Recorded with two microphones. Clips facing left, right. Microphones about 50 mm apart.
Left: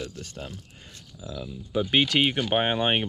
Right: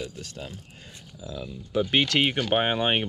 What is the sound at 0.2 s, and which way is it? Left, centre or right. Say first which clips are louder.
Speech: even; left.